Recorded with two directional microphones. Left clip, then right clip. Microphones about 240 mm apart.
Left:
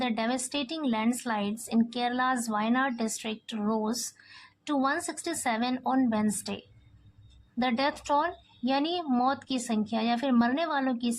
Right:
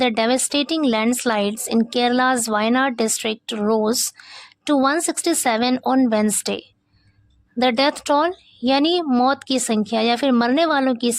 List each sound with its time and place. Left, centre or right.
0.0 s speech: right